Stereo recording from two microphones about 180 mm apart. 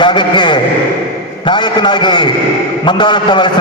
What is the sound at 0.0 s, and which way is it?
A man's voice, 25° left (ahead or behind).